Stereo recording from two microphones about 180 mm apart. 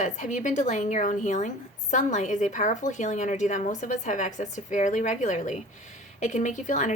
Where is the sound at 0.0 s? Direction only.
45° left (ahead or behind).